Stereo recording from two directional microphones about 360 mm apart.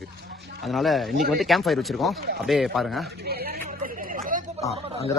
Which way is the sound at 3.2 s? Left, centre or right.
Right.